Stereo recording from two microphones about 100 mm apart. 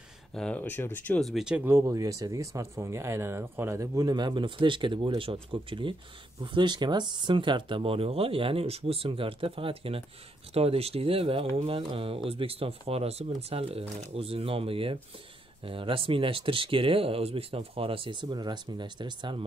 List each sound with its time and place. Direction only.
0.3 s speech: 10° left (ahead or behind)
1.2 s speech: 5° right (ahead or behind)
1.6 s speech: 25° right (ahead or behind)
4.1 s speech: 50° right (ahead or behind); by 10.0 s 65° right (ahead or behind)
10.5 s speech: 85° right; by 19.4 s 50° right (ahead or behind)